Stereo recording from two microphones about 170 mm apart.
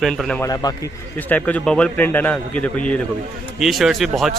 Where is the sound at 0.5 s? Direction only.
20° left (ahead or behind).